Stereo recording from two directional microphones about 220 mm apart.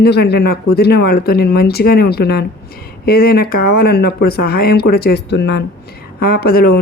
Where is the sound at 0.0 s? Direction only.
45° left (ahead or behind).